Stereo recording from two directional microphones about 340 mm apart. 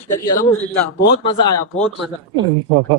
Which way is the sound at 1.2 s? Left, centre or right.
Centre.